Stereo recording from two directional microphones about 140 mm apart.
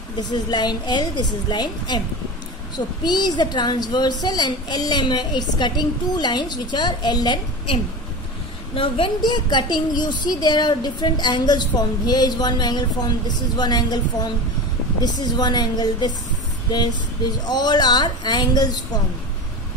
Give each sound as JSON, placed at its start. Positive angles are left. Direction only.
{"t": 0.3, "sound": "a woman's voice", "side_deg": 30}
{"t": 3.0, "sound": "a woman's voice", "side_deg": 30}
{"t": 15.0, "sound": "speech", "side_deg": 30}
{"t": 17.5, "sound": "speech", "side_deg": 30}